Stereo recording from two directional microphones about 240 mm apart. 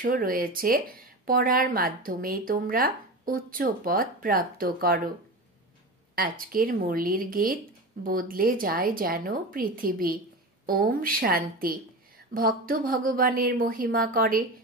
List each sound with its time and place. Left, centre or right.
0.0 s speech: right
6.1 s speech: right